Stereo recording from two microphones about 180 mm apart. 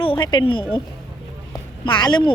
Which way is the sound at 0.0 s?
25° left (ahead or behind).